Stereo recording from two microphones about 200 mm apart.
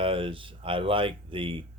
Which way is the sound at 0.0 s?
25° right (ahead or behind).